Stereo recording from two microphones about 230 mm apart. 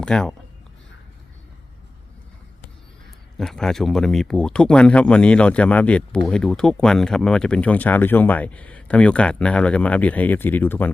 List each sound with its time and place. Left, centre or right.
0.0 s speech: centre
3.3 s speech: centre